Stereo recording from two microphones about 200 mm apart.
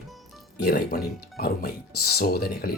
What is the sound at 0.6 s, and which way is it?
Speech, 50° left (ahead or behind).